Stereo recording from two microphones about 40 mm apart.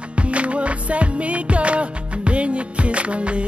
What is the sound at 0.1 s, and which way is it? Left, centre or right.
Music, right.